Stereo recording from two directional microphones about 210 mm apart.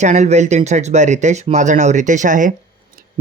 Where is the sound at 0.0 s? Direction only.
35° right (ahead or behind).